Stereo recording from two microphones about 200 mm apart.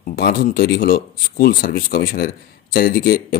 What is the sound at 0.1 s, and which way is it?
Speech, 50° left (ahead or behind).